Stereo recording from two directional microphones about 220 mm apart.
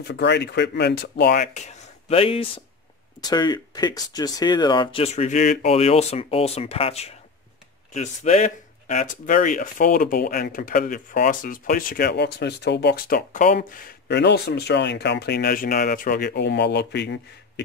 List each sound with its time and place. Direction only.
0.0 s speech: 50° left (ahead or behind)
2.0 s speech: 25° left (ahead or behind); by 17.2 s 50° left (ahead or behind)